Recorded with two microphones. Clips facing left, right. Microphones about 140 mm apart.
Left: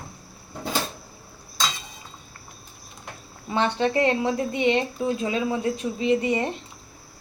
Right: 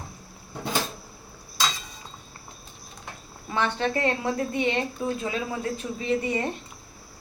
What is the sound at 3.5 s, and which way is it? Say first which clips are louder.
Speech: left 3 dB; 20° left (ahead or behind).